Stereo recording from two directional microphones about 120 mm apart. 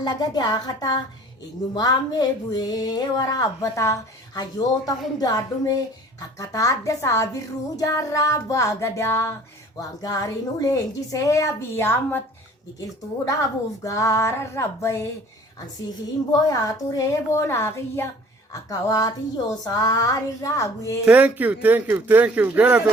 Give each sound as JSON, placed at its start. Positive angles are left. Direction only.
{"t": 0.0, "sound": "speech", "side_deg": 35}
{"t": 13.8, "sound": "speech", "side_deg": 25}
{"t": 16.5, "sound": "speech", "side_deg": 30}
{"t": 21.0, "sound": "speech", "side_deg": -10}